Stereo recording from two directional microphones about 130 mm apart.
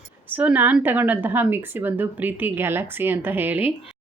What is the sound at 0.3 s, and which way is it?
Speech, 15° right (ahead or behind).